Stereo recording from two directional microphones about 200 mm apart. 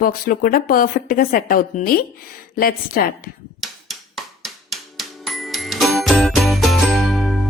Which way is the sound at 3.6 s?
Centre (ahead or behind).